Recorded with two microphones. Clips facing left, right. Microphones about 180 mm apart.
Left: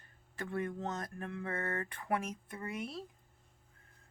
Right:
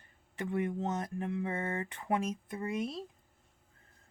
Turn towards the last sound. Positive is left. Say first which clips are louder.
# right 5 dB
turn(degrees=-20)  # may be behind; listen again after turning